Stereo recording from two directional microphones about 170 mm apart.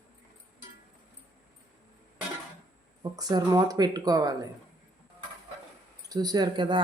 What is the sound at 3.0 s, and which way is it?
Speech, 20° right (ahead or behind).